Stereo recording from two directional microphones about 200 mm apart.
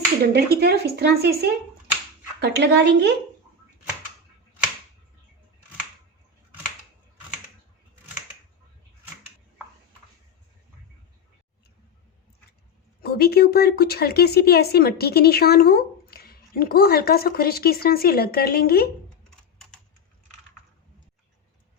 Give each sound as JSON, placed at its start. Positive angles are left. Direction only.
{"t": 0.3, "sound": "speech", "side_deg": -55}
{"t": 13.0, "sound": "speech", "side_deg": 50}